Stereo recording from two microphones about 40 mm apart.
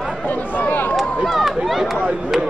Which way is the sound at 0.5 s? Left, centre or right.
Left.